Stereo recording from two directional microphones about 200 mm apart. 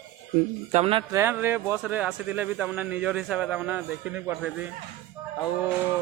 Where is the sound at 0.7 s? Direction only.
30° right (ahead or behind).